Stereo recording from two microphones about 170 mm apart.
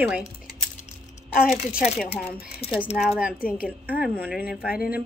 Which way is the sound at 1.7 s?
5° right (ahead or behind).